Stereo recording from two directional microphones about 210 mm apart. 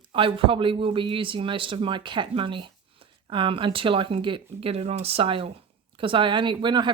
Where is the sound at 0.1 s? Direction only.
25° right (ahead or behind).